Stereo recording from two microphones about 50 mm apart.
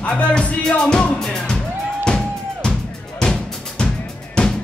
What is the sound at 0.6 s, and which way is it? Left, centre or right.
Music, centre.